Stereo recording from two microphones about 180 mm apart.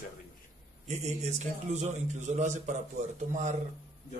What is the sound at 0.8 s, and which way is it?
A man's voice, 40° right (ahead or behind).